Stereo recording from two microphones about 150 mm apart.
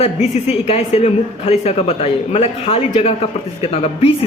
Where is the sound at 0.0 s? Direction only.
45° left (ahead or behind).